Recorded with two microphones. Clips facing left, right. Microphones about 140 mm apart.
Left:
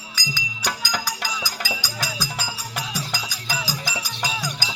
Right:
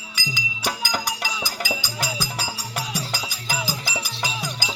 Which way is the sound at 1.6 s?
20° right (ahead or behind).